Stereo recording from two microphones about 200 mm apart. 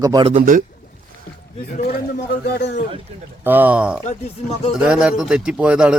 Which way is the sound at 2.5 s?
55° left (ahead or behind).